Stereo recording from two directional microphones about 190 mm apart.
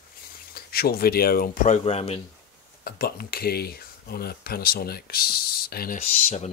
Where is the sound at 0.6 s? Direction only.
55° left (ahead or behind).